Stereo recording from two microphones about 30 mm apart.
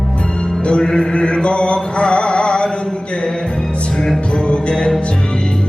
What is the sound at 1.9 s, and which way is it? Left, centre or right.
Music, left.